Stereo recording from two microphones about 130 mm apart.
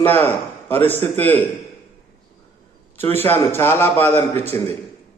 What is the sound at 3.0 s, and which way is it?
A man's voice, 15° left (ahead or behind).